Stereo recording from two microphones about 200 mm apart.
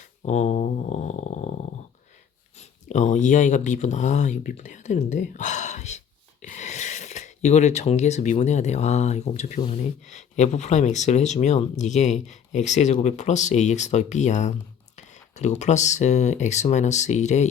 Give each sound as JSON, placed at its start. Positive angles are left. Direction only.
{"t": 0.2, "sound": "speech", "side_deg": 35}
{"t": 2.6, "sound": "speech", "side_deg": 35}